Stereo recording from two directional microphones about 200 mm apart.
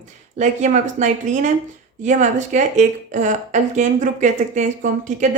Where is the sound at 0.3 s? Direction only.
35° right (ahead or behind).